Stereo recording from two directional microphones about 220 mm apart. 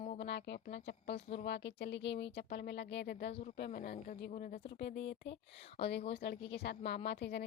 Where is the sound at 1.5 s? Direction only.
50° left (ahead or behind).